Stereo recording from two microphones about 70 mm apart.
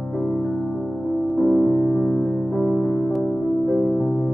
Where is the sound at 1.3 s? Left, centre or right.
Left.